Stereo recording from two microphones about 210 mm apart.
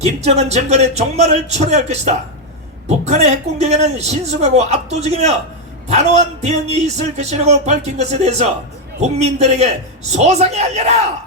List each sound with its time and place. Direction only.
0.0 s speech: 30° right (ahead or behind)